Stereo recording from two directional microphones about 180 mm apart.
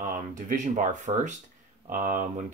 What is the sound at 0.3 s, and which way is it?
Speech, 45° right (ahead or behind).